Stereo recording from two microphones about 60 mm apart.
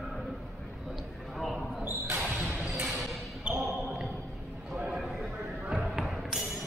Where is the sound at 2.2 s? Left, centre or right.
Right.